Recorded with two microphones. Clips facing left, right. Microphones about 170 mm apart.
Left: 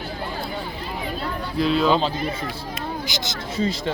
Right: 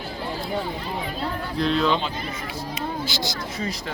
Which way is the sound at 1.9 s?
35° left (ahead or behind).